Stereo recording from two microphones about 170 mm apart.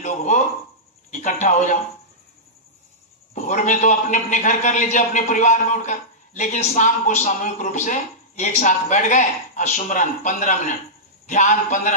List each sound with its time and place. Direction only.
1.1 s a man's voice: 50° left (ahead or behind)
3.3 s a man's voice: 45° left (ahead or behind)